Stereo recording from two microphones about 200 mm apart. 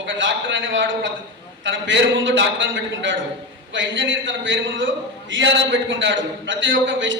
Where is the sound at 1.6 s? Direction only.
65° right (ahead or behind).